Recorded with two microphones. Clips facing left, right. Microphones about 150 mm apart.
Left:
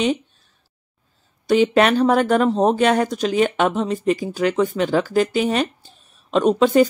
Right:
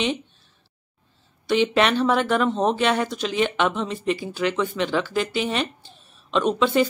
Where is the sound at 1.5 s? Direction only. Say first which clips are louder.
Left 4 dB; 40° left (ahead or behind).